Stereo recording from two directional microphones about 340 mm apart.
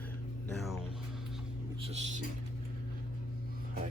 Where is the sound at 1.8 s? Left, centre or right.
Centre.